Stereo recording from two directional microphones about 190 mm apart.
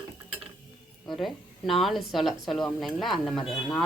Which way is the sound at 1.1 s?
Centre (ahead or behind).